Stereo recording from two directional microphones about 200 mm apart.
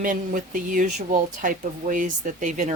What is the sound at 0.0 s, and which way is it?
Speech, 40° right (ahead or behind).